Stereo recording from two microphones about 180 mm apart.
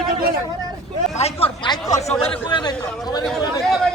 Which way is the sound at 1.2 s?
35° left (ahead or behind).